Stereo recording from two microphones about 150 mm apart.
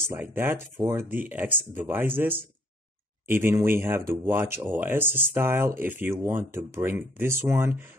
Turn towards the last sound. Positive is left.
turn(degrees=-15)  # may be behind; listen again after turning